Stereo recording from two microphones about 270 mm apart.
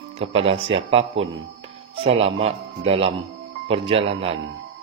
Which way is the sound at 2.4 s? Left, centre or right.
Right.